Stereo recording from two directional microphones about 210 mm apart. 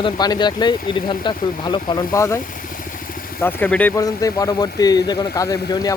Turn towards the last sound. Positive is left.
turn(degrees=15)  # may be behind; listen again after turning